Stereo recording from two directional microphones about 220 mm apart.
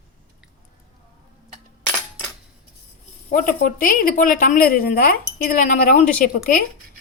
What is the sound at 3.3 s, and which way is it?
Speech, 40° left (ahead or behind).